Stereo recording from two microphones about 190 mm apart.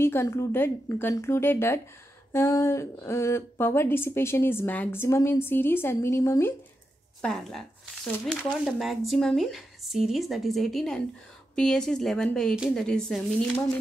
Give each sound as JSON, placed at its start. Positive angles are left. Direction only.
{"t": 0.0, "sound": "a woman's voice", "side_deg": 15}
{"t": 7.2, "sound": "speech", "side_deg": 0}